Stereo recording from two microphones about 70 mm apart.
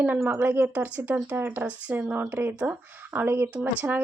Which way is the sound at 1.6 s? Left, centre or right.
Centre.